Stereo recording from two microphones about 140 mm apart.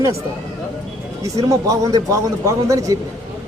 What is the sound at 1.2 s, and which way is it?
A man's voice, 25° right (ahead or behind).